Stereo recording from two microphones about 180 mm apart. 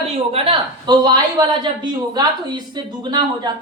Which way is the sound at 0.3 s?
30° right (ahead or behind).